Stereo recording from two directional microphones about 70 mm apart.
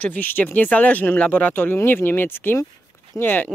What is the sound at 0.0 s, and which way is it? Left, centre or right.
Speech, left.